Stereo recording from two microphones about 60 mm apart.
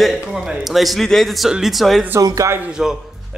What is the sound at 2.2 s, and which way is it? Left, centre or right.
Speech, right.